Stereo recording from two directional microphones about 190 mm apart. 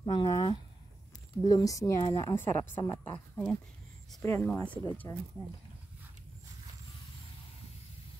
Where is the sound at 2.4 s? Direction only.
10° left (ahead or behind).